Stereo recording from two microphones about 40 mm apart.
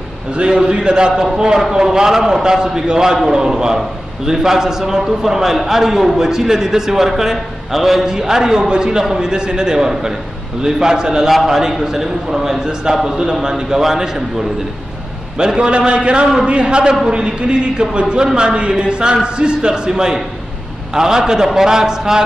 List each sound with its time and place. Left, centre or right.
0.3 s a man's voice: right
15.3 s a man's voice: right